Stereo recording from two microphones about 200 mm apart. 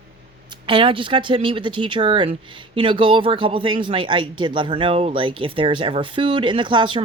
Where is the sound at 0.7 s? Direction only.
25° right (ahead or behind).